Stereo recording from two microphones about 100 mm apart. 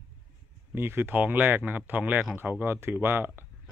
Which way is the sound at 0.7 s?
20° right (ahead or behind).